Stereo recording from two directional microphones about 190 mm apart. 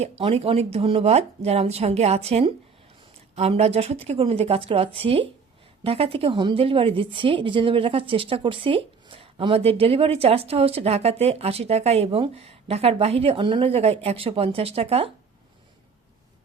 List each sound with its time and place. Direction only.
0.0 s a woman's voice: 30° right (ahead or behind)